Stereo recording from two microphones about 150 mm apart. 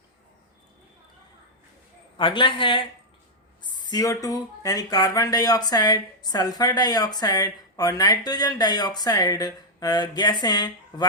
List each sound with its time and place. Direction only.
2.1 s a woman's voice: 35° left (ahead or behind)